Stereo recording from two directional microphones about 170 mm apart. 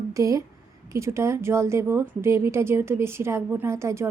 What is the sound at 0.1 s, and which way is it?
A woman's voice, 20° right (ahead or behind).